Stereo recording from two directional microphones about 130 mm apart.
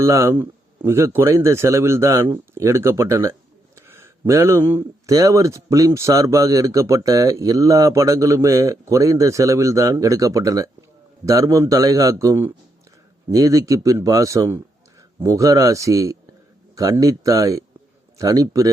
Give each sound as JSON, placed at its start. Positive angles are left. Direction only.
{"t": 0.0, "sound": "speech", "side_deg": -25}
{"t": 3.8, "sound": "a sound", "side_deg": -20}
{"t": 4.3, "sound": "speech", "side_deg": -20}